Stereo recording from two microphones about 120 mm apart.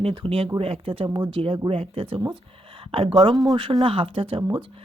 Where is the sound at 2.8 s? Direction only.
55° right (ahead or behind).